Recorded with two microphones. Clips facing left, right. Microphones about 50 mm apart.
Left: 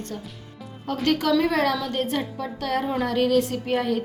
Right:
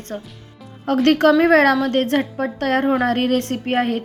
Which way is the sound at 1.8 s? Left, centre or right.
Right.